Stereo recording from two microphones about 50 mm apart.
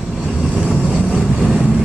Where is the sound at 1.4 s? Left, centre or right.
Centre.